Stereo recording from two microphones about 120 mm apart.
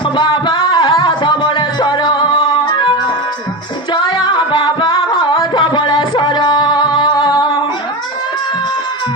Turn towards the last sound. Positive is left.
turn(degrees=40)  # may be behind; listen again after turning